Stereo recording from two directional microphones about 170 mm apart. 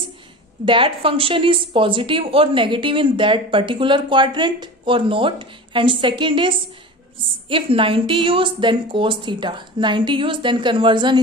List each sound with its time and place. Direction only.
0.7 s speech: 30° right (ahead or behind)